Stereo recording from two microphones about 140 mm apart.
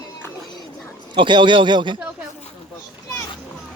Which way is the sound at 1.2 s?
35° right (ahead or behind).